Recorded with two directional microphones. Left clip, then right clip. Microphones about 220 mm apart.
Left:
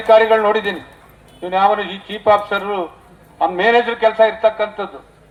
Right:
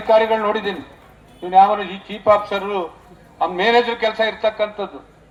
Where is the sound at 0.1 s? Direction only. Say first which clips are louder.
Left 4 dB; 40° left (ahead or behind).